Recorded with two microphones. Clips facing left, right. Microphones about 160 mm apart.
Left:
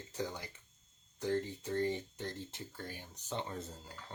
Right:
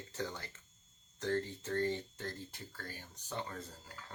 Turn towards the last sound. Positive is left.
turn(degrees=20)  # may be behind; listen again after turning